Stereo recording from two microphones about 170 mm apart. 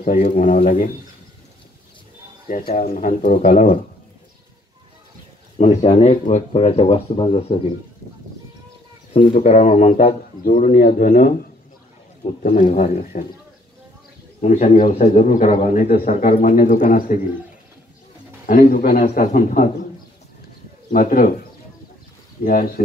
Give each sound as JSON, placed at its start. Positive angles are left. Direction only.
{"t": 0.0, "sound": "speech", "side_deg": 50}
{"t": 2.4, "sound": "speech", "side_deg": 55}
{"t": 5.6, "sound": "speech", "side_deg": 45}
{"t": 9.1, "sound": "speech", "side_deg": 40}
{"t": 12.4, "sound": "speech", "side_deg": 45}
{"t": 14.4, "sound": "speech", "side_deg": 45}
{"t": 18.5, "sound": "speech", "side_deg": 55}
{"t": 20.9, "sound": "speech", "side_deg": 50}
{"t": 22.4, "sound": "speech", "side_deg": 60}